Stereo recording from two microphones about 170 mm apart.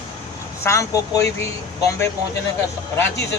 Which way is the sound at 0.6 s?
20° left (ahead or behind).